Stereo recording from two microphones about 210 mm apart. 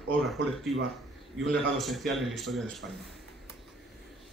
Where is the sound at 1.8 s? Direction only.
Centre (ahead or behind).